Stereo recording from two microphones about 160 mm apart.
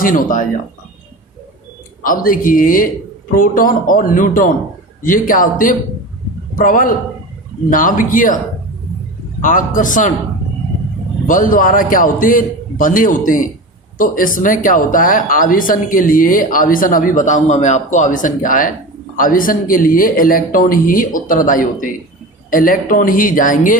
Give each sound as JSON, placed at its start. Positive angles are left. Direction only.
{"t": 0.0, "sound": "speech", "side_deg": 55}
{"t": 2.0, "sound": "speech", "side_deg": 60}
{"t": 9.4, "sound": "speech", "side_deg": 55}
{"t": 11.3, "sound": "speech", "side_deg": 55}